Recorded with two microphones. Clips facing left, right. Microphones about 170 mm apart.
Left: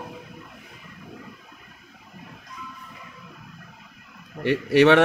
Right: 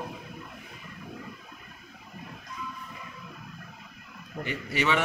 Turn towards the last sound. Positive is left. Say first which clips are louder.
# left 12 dB
turn(degrees=70)  # may be behind; listen again after turning